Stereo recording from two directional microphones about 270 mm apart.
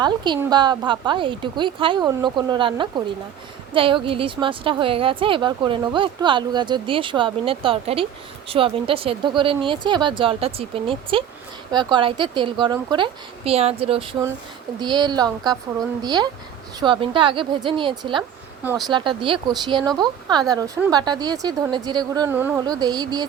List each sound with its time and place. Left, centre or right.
0.0 s a woman's voice: centre
18.2 s a woman's voice: centre